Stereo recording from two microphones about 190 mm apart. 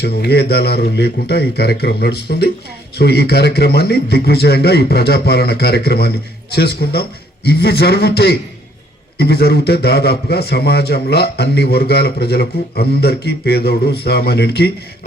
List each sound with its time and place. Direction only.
0.0 s a man's voice: 60° left (ahead or behind)